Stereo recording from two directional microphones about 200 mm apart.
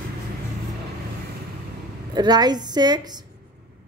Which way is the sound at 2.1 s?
20° right (ahead or behind).